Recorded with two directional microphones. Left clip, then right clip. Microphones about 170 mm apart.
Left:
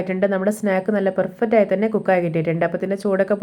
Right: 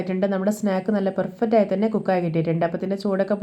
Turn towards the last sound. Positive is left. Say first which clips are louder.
# left 4 dB
turn(degrees=20)  # may be behind; listen again after turning